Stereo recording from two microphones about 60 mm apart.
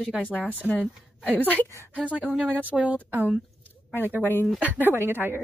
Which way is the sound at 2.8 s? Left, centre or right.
Right.